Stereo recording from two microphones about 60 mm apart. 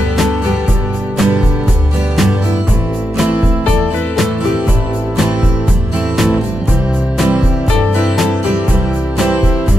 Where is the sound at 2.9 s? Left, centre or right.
Centre.